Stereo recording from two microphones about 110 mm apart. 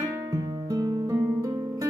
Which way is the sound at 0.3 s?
35° right (ahead or behind).